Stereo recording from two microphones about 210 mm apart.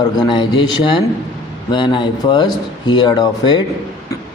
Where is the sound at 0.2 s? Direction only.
25° left (ahead or behind).